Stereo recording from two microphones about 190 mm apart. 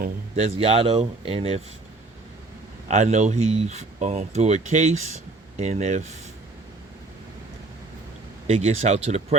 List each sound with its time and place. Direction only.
0.0 s speech: 35° right (ahead or behind)
2.9 s speech: 40° right (ahead or behind)
8.4 s speech: 35° right (ahead or behind)